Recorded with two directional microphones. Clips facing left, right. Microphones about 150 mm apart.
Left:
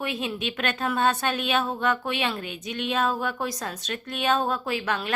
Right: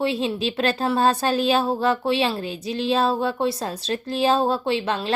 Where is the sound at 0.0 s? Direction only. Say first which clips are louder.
Right 7 dB; 30° right (ahead or behind).